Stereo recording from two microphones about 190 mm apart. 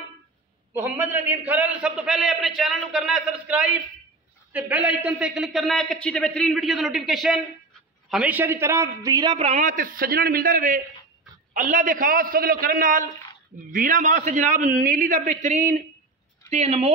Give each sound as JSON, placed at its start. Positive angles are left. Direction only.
{"t": 0.7, "sound": "a man's voice", "side_deg": -10}
{"t": 9.5, "sound": "a man's voice", "side_deg": -40}